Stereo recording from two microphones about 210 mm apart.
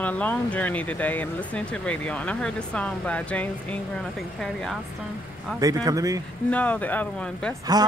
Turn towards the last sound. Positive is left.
turn(degrees=-20)  # may be behind; listen again after turning